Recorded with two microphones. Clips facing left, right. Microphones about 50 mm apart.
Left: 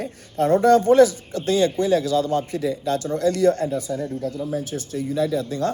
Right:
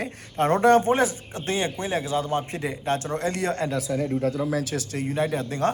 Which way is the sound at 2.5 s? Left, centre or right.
Right.